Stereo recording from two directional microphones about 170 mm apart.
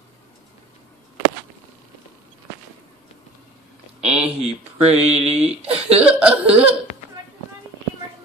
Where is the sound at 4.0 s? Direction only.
5° right (ahead or behind).